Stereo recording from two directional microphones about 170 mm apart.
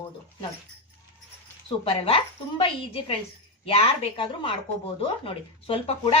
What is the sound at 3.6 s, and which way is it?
Speech, 35° left (ahead or behind).